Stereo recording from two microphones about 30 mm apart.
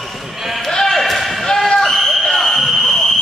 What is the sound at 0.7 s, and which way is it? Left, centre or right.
Basketball bounce, centre.